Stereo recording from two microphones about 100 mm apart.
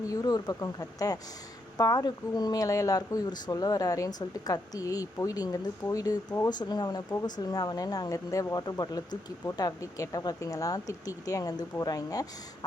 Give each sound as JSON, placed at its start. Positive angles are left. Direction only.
{"t": 0.1, "sound": "speech", "side_deg": 35}